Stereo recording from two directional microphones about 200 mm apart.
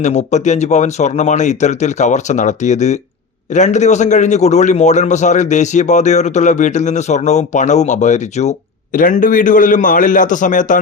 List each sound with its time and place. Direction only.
0.0 s a man's voice: 35° left (ahead or behind)